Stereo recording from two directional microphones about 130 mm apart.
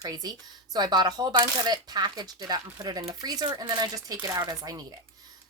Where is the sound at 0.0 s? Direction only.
30° right (ahead or behind).